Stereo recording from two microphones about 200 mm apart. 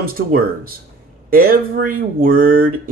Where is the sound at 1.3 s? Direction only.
45° right (ahead or behind).